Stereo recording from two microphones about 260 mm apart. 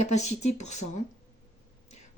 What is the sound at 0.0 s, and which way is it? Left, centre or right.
Speech, left.